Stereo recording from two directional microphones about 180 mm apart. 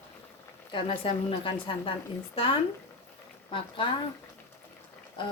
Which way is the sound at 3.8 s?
25° left (ahead or behind).